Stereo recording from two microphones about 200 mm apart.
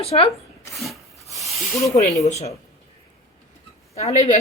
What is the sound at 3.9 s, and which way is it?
Speech, 35° left (ahead or behind).